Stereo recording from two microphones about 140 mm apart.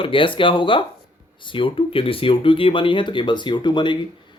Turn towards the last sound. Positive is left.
turn(degrees=35)  # may be behind; listen again after turning